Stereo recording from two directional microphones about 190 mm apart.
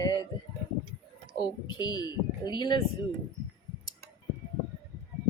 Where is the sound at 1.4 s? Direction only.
20° left (ahead or behind).